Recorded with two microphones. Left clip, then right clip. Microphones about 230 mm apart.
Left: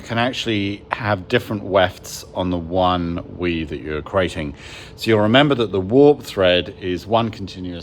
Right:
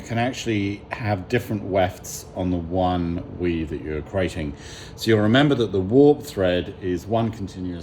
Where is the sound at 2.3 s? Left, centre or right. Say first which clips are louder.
Left 4 dB; left.